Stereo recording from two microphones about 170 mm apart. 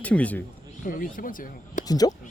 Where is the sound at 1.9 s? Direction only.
20° left (ahead or behind).